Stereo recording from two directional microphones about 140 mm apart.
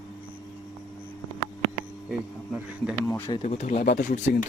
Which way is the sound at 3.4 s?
50° left (ahead or behind).